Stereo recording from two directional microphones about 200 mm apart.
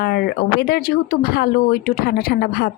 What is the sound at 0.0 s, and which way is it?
Speech, 50° left (ahead or behind).